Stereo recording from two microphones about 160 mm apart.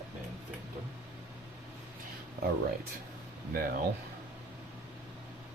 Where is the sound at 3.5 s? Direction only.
70° right (ahead or behind).